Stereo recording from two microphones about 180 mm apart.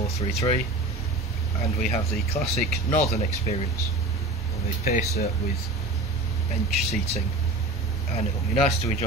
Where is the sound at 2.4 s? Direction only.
35° left (ahead or behind).